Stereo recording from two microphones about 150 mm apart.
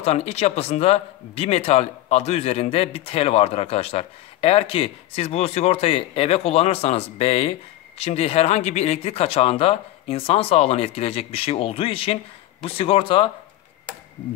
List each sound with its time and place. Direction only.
0.0 s speech: 45° left (ahead or behind)